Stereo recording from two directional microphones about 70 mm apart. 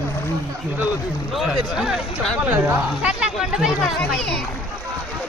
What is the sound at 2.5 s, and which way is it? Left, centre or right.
Speech, right.